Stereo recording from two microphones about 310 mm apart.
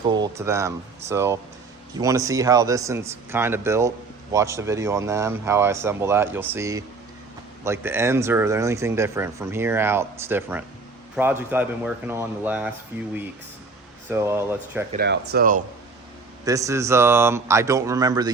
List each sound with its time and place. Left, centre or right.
0.1 s speech: centre
14.1 s speech: centre
14.9 s speech: right
16.4 s speech: centre